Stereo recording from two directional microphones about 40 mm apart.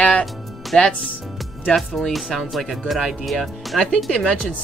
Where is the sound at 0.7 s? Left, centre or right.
Centre.